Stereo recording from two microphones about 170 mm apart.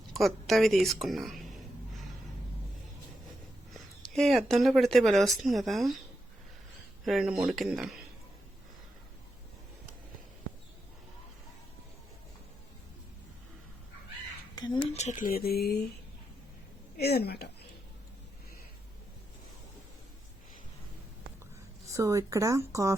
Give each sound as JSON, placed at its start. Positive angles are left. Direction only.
{"t": 0.1, "sound": "speech", "side_deg": 0}
{"t": 3.8, "sound": "speech", "side_deg": 0}
{"t": 7.0, "sound": "speech", "side_deg": 0}
{"t": 14.8, "sound": "speech", "side_deg": 40}
{"t": 17.0, "sound": "speech", "side_deg": 70}
{"t": 21.8, "sound": "speech", "side_deg": -15}